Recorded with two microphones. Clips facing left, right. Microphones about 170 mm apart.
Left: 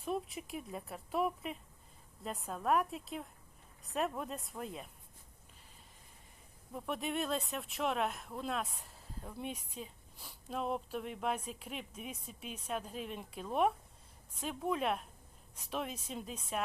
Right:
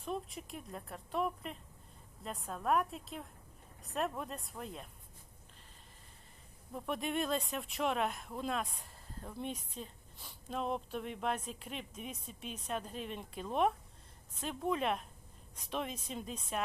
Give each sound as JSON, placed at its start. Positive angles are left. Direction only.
{"t": 0.0, "sound": "speech", "side_deg": 0}
{"t": 6.7, "sound": "a woman's voice", "side_deg": 0}